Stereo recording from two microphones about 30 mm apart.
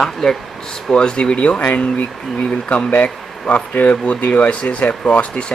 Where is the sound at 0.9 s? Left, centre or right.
Left.